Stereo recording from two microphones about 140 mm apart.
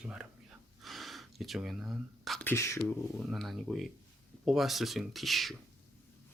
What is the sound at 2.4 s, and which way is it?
Speech, 20° left (ahead or behind).